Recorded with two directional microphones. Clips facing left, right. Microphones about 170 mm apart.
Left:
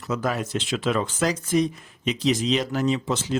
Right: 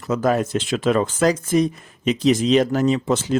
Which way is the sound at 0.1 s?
45° right (ahead or behind).